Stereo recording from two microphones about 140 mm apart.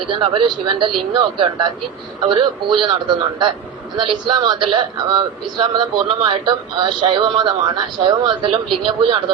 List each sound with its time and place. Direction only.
0.1 s speech: 35° right (ahead or behind)